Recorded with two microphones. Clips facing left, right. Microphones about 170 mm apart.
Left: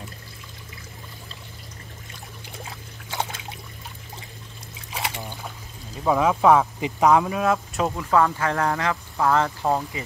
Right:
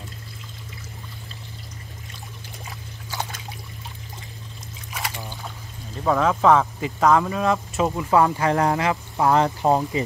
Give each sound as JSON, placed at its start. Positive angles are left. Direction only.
{"t": 4.9, "sound": "trickle", "side_deg": 25}
{"t": 6.0, "sound": "speech", "side_deg": 10}
{"t": 8.2, "sound": "speech", "side_deg": -20}